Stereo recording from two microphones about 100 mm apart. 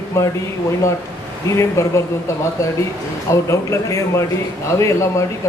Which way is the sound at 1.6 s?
30° left (ahead or behind).